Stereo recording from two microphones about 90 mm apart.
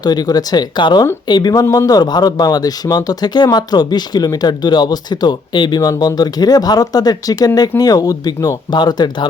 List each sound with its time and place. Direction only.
0.0 s speech: 50° left (ahead or behind)
8.7 s speech: 50° left (ahead or behind)